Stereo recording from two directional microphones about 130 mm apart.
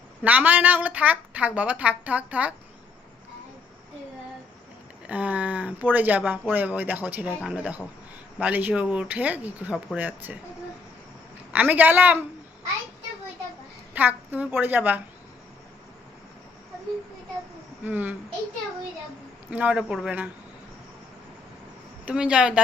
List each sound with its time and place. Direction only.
0.3 s a woman's voice: 15° right (ahead or behind)
5.0 s a woman's voice: 10° right (ahead or behind)
11.5 s a woman's voice: 15° right (ahead or behind)
13.9 s a woman's voice: 15° right (ahead or behind)
17.8 s a woman's voice: 15° right (ahead or behind)
19.5 s a woman's voice: 10° right (ahead or behind)
22.0 s a woman's voice: 10° right (ahead or behind)